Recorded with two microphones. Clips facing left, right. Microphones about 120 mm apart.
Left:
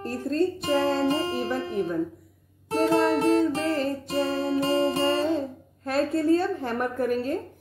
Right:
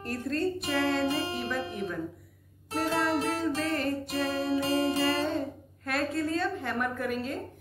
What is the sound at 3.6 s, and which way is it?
Speech, 30° left (ahead or behind).